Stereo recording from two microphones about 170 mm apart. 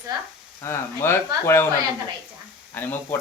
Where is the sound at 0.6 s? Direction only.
15° left (ahead or behind).